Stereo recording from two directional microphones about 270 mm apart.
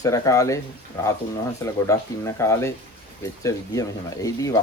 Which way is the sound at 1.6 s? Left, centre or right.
Centre.